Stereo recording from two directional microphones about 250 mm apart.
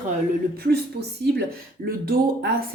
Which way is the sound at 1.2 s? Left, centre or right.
Right.